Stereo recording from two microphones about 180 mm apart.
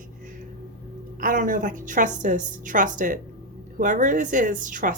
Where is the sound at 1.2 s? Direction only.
50° right (ahead or behind).